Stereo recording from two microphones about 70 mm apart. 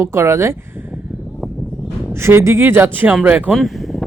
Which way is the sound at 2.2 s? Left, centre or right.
Right.